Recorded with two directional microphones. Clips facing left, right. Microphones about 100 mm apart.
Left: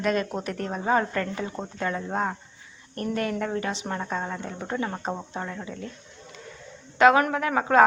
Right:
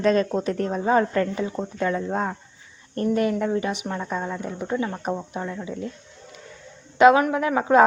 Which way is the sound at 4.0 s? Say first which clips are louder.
Right 2 dB; 20° left (ahead or behind).